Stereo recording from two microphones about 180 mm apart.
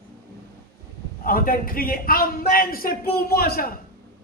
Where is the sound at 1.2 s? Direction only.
50° left (ahead or behind).